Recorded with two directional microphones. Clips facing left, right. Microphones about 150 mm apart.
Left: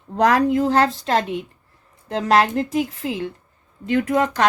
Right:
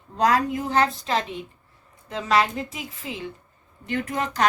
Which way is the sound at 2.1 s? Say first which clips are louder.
Left 5 dB; 75° left (ahead or behind).